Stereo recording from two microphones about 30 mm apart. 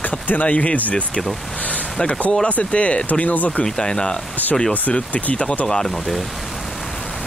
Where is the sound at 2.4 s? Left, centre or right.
Left.